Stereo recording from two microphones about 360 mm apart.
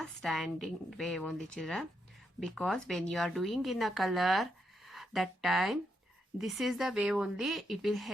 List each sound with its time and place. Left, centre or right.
0.0 s speech: centre